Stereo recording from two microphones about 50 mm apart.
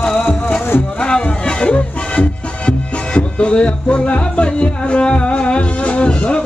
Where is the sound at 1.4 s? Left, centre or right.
Left.